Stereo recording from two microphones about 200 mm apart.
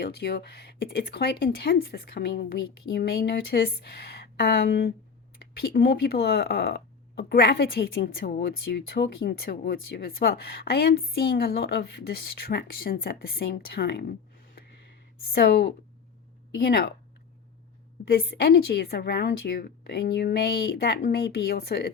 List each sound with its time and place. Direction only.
0.0 s speech: 55° left (ahead or behind)
15.3 s speech: 55° left (ahead or behind)
18.1 s speech: 55° left (ahead or behind)